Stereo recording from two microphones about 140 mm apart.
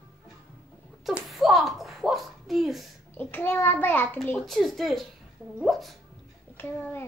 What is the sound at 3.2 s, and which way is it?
A child's voice, 15° left (ahead or behind).